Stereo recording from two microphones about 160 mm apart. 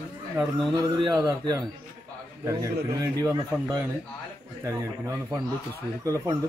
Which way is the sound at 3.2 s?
20° right (ahead or behind).